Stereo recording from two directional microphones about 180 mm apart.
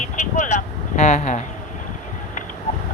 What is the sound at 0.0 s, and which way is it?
Vehicle, 40° left (ahead or behind).